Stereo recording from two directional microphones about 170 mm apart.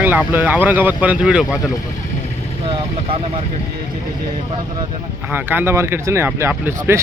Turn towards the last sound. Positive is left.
turn(degrees=-15)  # may be behind; listen again after turning